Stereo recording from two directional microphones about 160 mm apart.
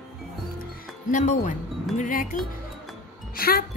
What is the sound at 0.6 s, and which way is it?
Music, 55° left (ahead or behind).